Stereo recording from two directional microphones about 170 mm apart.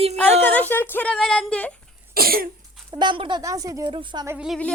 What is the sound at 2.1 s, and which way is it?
Speech, 60° right (ahead or behind).